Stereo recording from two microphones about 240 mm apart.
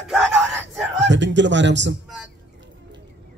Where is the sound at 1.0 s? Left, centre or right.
Right.